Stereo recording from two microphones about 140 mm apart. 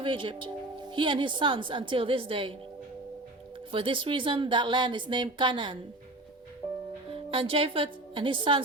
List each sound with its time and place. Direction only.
0.0 s a woman's voice: 35° right (ahead or behind)
3.7 s a woman's voice: 40° right (ahead or behind)
7.1 s a woman's voice: 40° right (ahead or behind)